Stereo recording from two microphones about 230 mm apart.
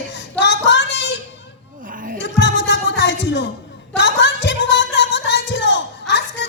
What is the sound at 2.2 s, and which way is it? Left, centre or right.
Music, left.